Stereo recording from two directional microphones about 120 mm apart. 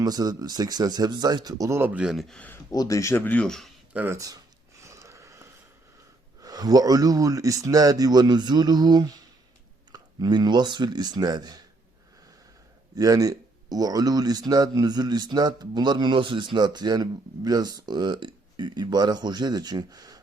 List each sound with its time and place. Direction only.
0.0 s speech: 35° right (ahead or behind)
1.9 s speech: 5° right (ahead or behind)
2.6 s speech: 30° left (ahead or behind); by 3.7 s 5° left (ahead or behind)
3.9 s speech: 15° right (ahead or behind)
4.8 s a sound: 25° right (ahead or behind)
6.4 s speech: 30° right (ahead or behind)
13.0 s speech: 30° right (ahead or behind)